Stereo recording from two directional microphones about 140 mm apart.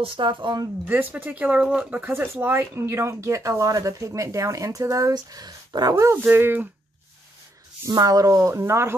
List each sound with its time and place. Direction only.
0.0 s speech: 40° right (ahead or behind)
0.8 s speech: 15° right (ahead or behind)
7.8 s speech: 25° right (ahead or behind)